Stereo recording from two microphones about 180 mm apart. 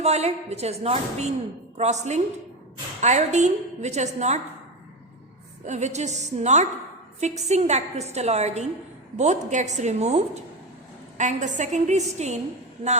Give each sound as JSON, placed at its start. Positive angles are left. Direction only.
{"t": 0.0, "sound": "a woman's voice", "side_deg": -35}
{"t": 5.6, "sound": "a woman's voice", "side_deg": -40}